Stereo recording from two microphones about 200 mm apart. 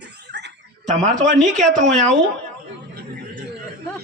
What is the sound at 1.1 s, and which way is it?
Speech, 40° right (ahead or behind).